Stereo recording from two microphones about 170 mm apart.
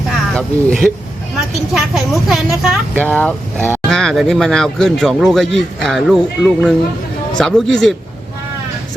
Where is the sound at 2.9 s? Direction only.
10° left (ahead or behind).